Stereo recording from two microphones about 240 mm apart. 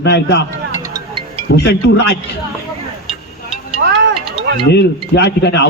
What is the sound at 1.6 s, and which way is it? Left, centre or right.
Speech, left.